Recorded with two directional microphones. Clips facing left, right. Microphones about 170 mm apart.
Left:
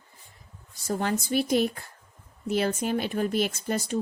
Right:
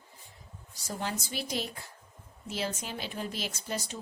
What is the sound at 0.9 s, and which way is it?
Speech, 55° left (ahead or behind).